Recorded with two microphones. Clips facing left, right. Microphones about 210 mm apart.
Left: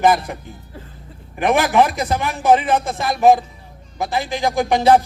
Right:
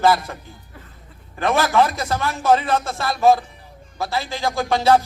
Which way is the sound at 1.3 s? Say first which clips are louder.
Left 2 dB; 15° left (ahead or behind).